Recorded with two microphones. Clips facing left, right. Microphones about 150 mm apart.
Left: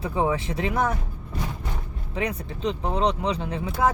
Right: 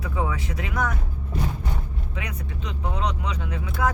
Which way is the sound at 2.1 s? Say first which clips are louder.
Left 8 dB; 30° left (ahead or behind).